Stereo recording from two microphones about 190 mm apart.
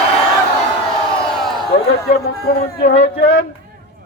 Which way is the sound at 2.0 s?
50° left (ahead or behind).